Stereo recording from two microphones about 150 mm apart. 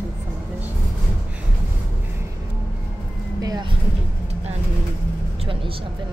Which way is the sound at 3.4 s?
25° right (ahead or behind).